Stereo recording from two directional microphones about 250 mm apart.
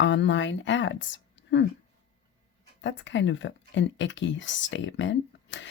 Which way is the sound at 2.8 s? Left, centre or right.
Left.